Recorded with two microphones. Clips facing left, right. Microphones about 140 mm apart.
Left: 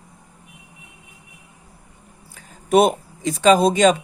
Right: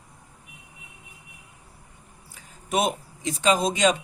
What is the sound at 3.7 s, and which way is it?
Speech, 50° left (ahead or behind).